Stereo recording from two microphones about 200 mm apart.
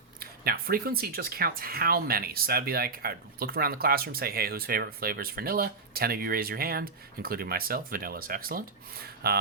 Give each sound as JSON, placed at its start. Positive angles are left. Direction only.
{"t": 0.2, "sound": "speech", "side_deg": -50}